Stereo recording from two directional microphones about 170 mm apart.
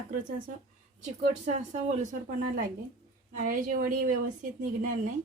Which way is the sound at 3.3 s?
50° right (ahead or behind).